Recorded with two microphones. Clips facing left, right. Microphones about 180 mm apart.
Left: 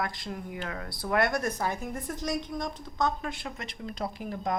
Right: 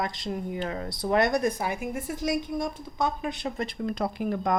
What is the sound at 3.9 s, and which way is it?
Speech, 55° right (ahead or behind).